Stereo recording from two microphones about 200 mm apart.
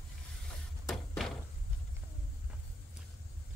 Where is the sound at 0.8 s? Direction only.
Centre (ahead or behind).